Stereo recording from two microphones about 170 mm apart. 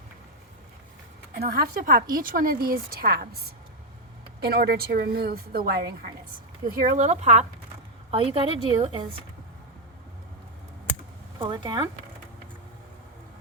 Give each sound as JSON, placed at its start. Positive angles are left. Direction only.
{"t": 1.3, "sound": "speech", "side_deg": -60}
{"t": 4.4, "sound": "a woman's voice", "side_deg": -70}
{"t": 6.8, "sound": "speech", "side_deg": -45}
{"t": 11.3, "sound": "speech", "side_deg": -25}